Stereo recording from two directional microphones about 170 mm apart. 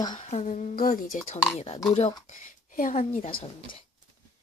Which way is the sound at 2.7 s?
50° left (ahead or behind).